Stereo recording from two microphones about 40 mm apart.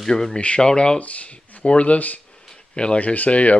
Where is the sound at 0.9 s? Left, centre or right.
Left.